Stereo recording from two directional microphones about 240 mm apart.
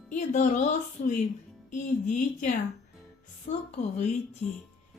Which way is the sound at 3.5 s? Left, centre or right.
Left.